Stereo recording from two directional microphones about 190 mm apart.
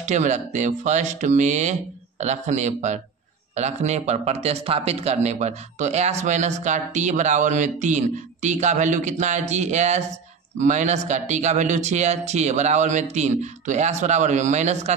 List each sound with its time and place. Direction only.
0.0 s speech: 40° right (ahead or behind)